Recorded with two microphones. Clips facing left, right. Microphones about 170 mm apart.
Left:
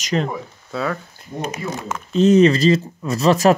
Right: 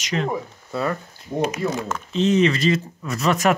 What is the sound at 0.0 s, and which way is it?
Speech, 40° left (ahead or behind).